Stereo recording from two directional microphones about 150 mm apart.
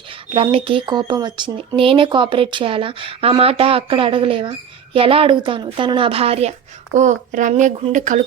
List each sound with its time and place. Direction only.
0.1 s speech: 40° right (ahead or behind)
6.9 s a child's voice: 55° right (ahead or behind)